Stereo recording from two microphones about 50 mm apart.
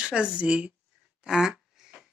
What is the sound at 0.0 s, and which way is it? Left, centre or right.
Speech, right.